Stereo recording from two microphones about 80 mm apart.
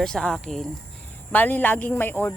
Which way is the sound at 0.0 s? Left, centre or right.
Centre.